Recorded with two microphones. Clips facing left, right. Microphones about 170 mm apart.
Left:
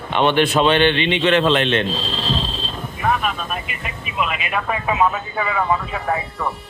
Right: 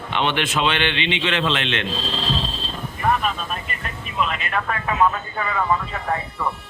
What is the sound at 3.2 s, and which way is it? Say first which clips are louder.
Speech: left 1 dB; 10° left (ahead or behind).